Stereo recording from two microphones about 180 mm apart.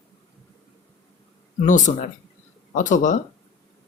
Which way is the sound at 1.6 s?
45° left (ahead or behind).